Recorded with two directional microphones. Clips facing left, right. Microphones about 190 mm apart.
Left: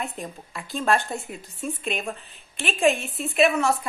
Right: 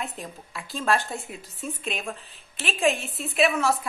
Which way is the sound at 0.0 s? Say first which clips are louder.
Left 2 dB; centre (ahead or behind).